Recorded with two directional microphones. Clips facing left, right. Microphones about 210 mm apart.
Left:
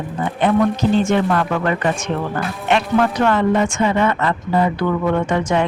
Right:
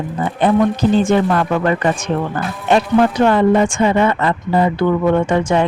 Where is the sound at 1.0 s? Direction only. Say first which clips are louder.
Right 3 dB; 35° right (ahead or behind).